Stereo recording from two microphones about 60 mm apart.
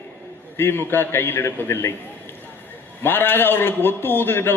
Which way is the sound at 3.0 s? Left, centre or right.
Left.